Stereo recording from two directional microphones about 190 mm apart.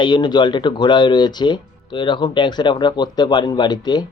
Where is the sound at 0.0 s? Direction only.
25° left (ahead or behind).